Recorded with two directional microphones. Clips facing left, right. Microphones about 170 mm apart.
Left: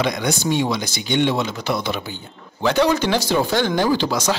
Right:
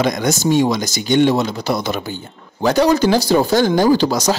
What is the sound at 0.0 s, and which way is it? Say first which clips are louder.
Speech: right 4 dB; 45° right (ahead or behind).